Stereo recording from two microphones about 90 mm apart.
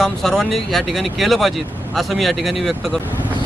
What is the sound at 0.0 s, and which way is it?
Speech, centre (ahead or behind).